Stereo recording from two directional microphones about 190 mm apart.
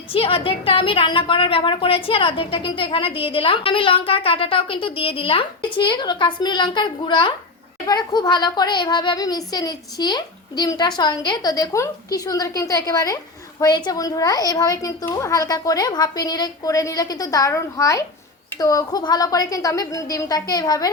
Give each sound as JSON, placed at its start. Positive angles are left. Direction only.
{"t": 0.1, "sound": "a woman's voice", "side_deg": 30}